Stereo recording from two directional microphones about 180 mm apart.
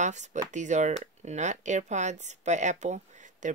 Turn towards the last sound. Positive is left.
turn(degrees=-45)  # may be behind; listen again after turning